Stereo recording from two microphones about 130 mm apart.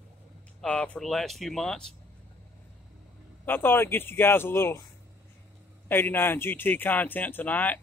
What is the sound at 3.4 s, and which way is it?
Speech, 15° left (ahead or behind).